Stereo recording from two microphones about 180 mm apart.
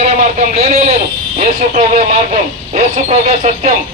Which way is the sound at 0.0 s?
40° right (ahead or behind).